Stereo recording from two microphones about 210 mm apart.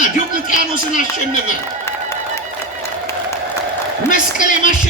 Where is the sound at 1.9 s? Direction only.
15° left (ahead or behind).